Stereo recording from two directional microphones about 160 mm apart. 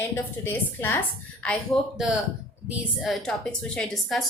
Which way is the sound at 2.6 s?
5° right (ahead or behind).